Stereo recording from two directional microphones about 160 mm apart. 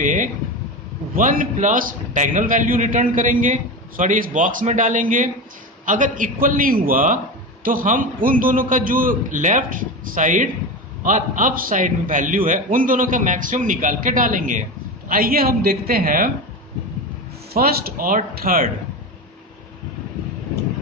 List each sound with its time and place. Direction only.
0.0 s a sound: 55° right (ahead or behind)
1.1 s a man's voice: 60° right (ahead or behind)
15.0 s a man's voice: 65° right (ahead or behind)
17.6 s a man's voice: 65° right (ahead or behind)